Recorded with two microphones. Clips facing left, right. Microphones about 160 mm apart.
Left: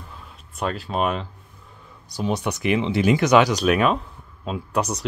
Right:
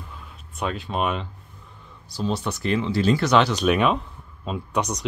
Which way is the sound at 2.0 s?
15° left (ahead or behind).